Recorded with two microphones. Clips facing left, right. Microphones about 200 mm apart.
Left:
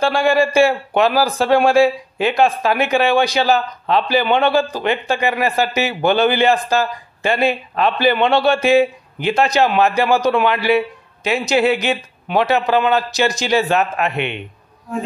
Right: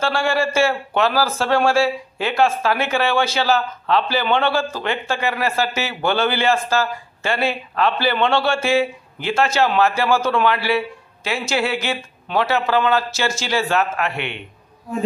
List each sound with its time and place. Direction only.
0.0 s a man's voice: 15° left (ahead or behind)